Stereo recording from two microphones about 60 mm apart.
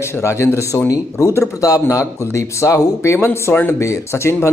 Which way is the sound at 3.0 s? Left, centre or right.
Left.